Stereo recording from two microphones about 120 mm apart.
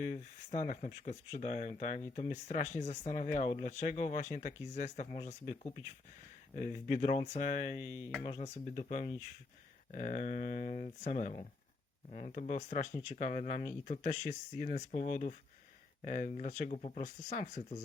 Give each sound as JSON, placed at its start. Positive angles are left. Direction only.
{"t": 0.0, "sound": "speech", "side_deg": 90}
{"t": 2.2, "sound": "speech", "side_deg": 75}
{"t": 4.7, "sound": "speech", "side_deg": 90}
{"t": 5.1, "sound": "speech", "side_deg": 70}
{"t": 6.6, "sound": "speech", "side_deg": 90}
{"t": 8.2, "sound": "speech", "side_deg": 50}
{"t": 8.5, "sound": "speech", "side_deg": 80}
{"t": 9.9, "sound": "speech", "side_deg": 90}
{"t": 16.7, "sound": "speech", "side_deg": 70}